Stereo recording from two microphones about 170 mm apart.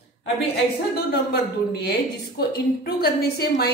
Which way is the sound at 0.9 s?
65° left (ahead or behind).